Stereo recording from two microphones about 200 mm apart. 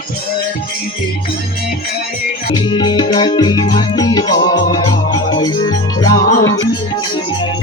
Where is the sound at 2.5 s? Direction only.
25° left (ahead or behind).